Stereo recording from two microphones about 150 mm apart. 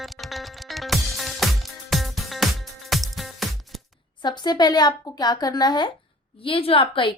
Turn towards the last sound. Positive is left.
turn(degrees=35)  # may be behind; listen again after turning